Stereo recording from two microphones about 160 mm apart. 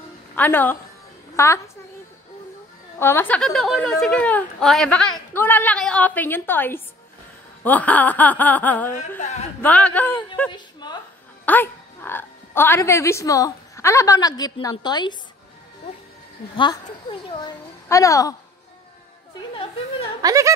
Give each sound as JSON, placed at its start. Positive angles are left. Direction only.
{"t": 0.4, "sound": "a woman's voice", "side_deg": 10}
{"t": 3.0, "sound": "a woman's voice", "side_deg": 15}
{"t": 9.2, "sound": "speech", "side_deg": 45}
{"t": 9.6, "sound": "a woman's voice", "side_deg": 10}
{"t": 10.5, "sound": "a sound", "side_deg": 25}
{"t": 11.4, "sound": "a woman's voice", "side_deg": 10}
{"t": 16.5, "sound": "a child's voice", "side_deg": 30}
{"t": 19.5, "sound": "speech", "side_deg": 35}
{"t": 20.2, "sound": "speech", "side_deg": -20}